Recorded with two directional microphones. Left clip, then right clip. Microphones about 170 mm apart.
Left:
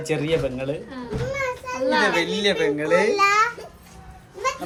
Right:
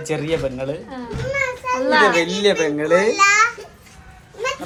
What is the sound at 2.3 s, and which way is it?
Speech, 5° right (ahead or behind).